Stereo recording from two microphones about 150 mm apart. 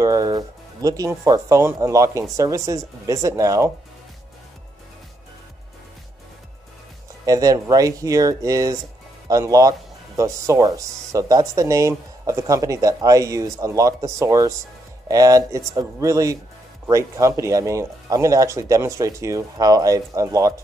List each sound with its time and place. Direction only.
0.0 s speech: 25° right (ahead or behind)
7.2 s speech: 25° right (ahead or behind)